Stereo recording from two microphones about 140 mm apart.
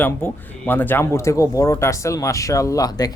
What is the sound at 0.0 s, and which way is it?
Speech, 15° left (ahead or behind).